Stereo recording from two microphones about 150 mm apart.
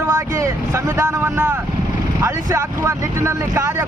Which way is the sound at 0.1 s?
20° right (ahead or behind).